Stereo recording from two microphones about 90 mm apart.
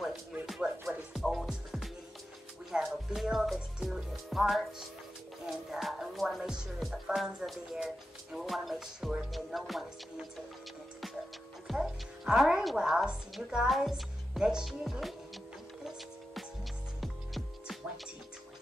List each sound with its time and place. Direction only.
0.0 s music: centre (ahead or behind)
11.6 s a woman's voice: 5° right (ahead or behind)
17.0 s music: centre (ahead or behind)